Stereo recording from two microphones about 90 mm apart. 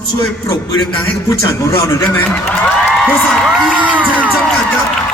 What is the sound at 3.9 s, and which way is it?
Music, 15° right (ahead or behind).